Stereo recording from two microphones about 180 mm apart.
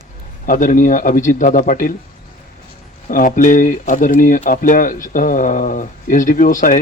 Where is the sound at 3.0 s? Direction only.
50° left (ahead or behind).